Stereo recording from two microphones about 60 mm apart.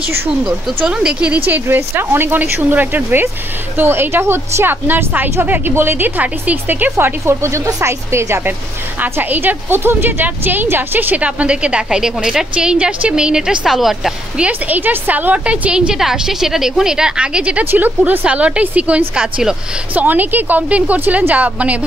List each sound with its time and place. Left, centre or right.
0.8 s a woman's voice: centre
2.0 s speech: right
7.4 s speech: right
9.0 s a woman's voice: right; by 13.6 s centre
13.7 s a woman's voice: centre
14.4 s a woman's voice: right
17.6 s speech: right
18.2 s a woman's voice: centre